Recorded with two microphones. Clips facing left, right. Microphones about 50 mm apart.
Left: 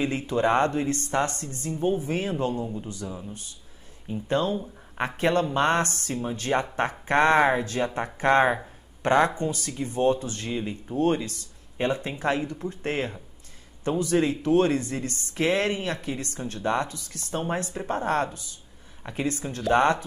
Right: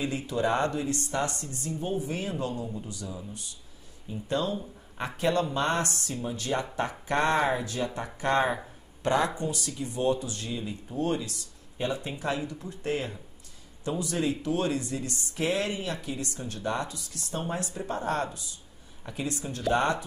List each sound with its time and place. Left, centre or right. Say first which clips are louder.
0.0 s speech: left 4 dB; left